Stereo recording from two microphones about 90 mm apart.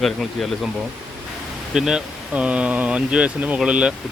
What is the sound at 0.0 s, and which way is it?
Speech, centre (ahead or behind).